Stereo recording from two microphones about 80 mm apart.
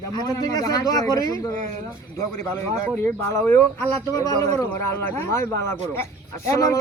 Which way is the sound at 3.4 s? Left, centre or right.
Left.